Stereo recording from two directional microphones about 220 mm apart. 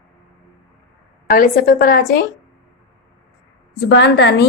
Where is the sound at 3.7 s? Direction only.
50° left (ahead or behind).